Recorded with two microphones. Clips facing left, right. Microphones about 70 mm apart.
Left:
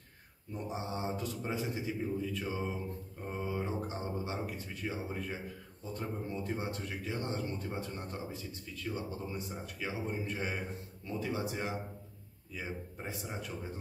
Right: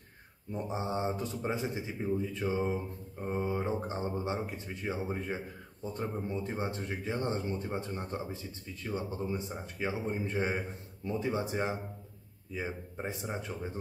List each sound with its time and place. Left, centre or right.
0.5 s speech: right